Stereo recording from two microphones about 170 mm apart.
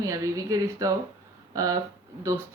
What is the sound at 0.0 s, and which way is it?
Speech, 20° right (ahead or behind).